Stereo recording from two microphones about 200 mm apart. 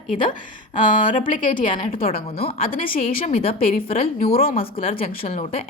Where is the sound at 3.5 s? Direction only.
45° left (ahead or behind).